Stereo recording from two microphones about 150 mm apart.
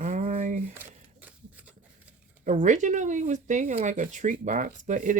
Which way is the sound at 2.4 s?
55° right (ahead or behind).